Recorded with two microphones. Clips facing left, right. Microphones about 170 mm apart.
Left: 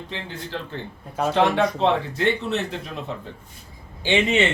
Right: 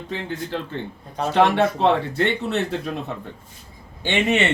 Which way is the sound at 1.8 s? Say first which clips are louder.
Right 2 dB; 60° right (ahead or behind).